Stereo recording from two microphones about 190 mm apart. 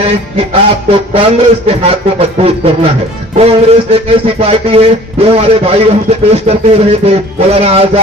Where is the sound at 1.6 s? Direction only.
30° right (ahead or behind).